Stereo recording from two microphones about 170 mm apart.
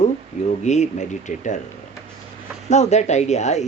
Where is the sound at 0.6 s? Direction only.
45° left (ahead or behind).